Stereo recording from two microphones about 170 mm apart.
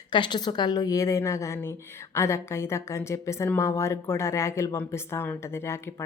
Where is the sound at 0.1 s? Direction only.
25° left (ahead or behind).